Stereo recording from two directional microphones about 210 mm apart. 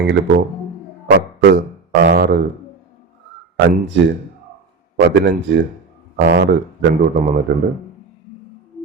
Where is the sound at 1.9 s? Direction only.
55° right (ahead or behind).